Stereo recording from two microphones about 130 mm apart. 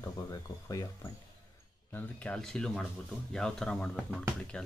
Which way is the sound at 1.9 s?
10° left (ahead or behind).